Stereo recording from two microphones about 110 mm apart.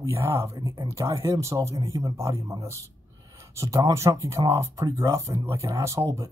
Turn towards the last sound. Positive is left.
turn(degrees=-30)  # may be behind; listen again after turning